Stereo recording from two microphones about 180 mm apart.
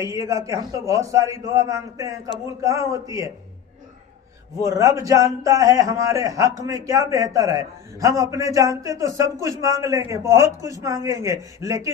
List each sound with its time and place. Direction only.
0.0 s a man's voice: 15° right (ahead or behind)
4.6 s a man's voice: 20° right (ahead or behind)